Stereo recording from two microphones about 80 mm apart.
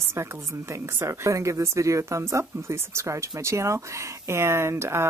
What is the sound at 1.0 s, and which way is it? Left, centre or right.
Speech, right.